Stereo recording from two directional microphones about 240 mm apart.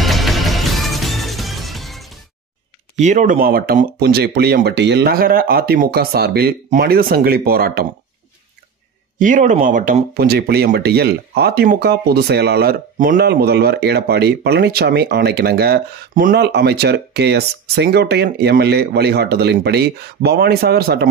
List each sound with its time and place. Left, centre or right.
0.0 s music: centre
3.0 s speech: right
9.2 s speech: right